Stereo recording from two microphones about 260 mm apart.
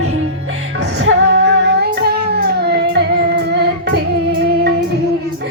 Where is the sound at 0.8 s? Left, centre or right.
Right.